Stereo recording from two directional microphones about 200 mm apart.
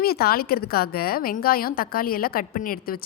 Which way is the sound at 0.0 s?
50° left (ahead or behind).